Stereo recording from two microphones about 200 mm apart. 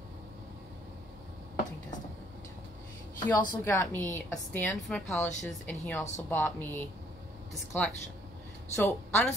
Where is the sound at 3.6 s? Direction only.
10° left (ahead or behind).